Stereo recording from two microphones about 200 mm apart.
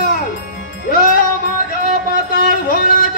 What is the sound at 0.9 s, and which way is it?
Music, 45° left (ahead or behind).